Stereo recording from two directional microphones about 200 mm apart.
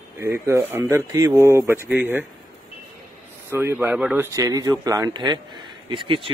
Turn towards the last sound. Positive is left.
turn(degrees=-25)  # may be behind; listen again after turning